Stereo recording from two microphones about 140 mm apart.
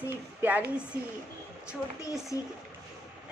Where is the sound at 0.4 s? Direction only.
10° right (ahead or behind).